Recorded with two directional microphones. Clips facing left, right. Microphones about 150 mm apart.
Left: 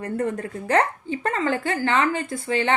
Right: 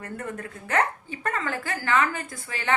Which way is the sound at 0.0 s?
30° left (ahead or behind).